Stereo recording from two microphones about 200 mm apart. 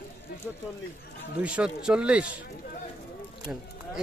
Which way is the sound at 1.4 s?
5° right (ahead or behind).